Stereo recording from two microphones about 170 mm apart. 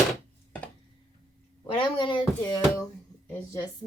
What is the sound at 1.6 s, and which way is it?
Speech, 30° left (ahead or behind).